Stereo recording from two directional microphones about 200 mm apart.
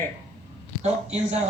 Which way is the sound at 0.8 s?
35° right (ahead or behind).